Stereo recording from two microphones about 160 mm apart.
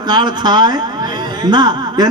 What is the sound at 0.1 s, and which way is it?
A man's voice, 25° right (ahead or behind).